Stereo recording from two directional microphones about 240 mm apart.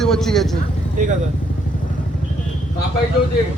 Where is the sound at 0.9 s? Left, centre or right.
Right.